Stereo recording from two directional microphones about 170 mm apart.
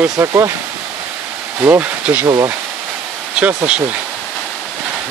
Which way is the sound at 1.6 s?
10° right (ahead or behind).